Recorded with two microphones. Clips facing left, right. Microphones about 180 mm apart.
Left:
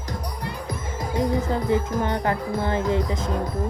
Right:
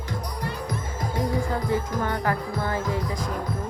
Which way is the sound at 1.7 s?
20° left (ahead or behind).